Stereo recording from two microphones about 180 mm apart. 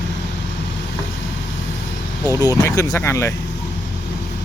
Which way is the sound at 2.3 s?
20° left (ahead or behind).